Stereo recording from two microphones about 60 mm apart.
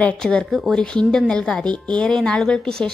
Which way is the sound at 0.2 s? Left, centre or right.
Centre.